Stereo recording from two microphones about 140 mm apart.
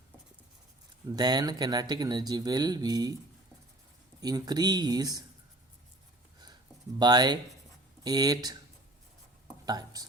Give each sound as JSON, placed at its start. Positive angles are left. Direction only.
{"t": 1.1, "sound": "speech", "side_deg": -30}
{"t": 4.2, "sound": "speech", "side_deg": -30}
{"t": 7.0, "sound": "speech", "side_deg": -30}
{"t": 9.6, "sound": "speech", "side_deg": -30}